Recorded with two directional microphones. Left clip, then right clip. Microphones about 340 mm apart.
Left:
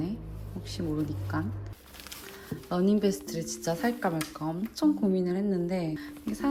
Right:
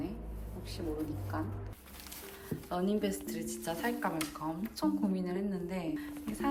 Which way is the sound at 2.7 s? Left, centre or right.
Centre.